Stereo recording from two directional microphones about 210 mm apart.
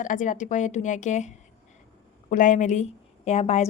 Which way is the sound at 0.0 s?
40° left (ahead or behind).